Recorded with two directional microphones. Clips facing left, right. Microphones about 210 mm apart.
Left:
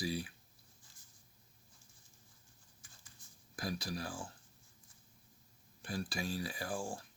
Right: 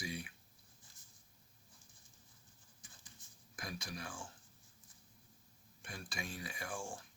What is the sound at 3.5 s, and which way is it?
Speech, 35° left (ahead or behind).